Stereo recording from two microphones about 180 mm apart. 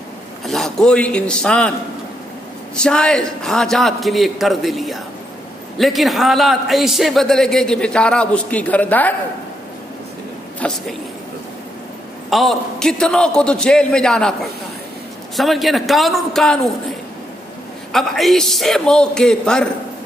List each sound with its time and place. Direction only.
0.5 s speech: centre (ahead or behind)
2.7 s a man's voice: 5° left (ahead or behind)
10.6 s speech: 5° left (ahead or behind)
12.3 s a man's voice: centre (ahead or behind)
15.3 s a man's voice: centre (ahead or behind)
17.9 s a man's voice: centre (ahead or behind)